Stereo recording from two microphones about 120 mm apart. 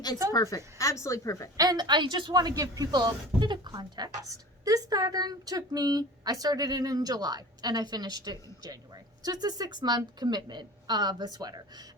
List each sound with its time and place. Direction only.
0.3 s speech: 25° left (ahead or behind)
1.5 s speech: 35° right (ahead or behind)